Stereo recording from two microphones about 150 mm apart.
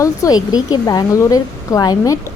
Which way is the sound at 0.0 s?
25° left (ahead or behind).